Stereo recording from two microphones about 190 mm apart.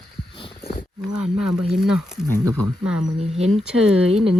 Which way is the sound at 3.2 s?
35° right (ahead or behind).